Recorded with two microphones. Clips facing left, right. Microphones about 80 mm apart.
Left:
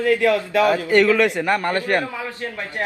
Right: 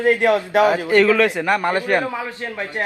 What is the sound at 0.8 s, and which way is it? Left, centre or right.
A man's voice, centre.